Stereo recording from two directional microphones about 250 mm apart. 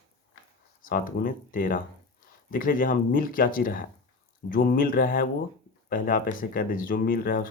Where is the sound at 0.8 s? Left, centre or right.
Left.